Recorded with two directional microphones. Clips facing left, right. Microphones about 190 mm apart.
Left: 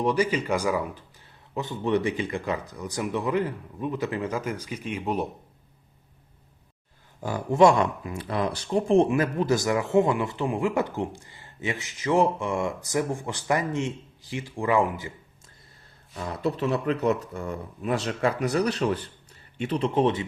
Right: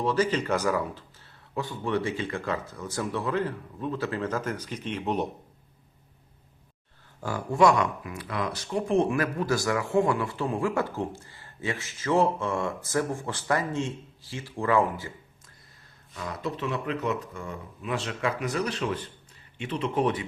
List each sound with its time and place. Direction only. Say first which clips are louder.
0.0 s speech: left 1 dB; 15° left (ahead or behind)
7.2 s speech: left 3 dB; 20° left (ahead or behind)
16.1 s speech: left 5 dB; 35° left (ahead or behind)
19.9 s speech: left 2 dB; 25° left (ahead or behind)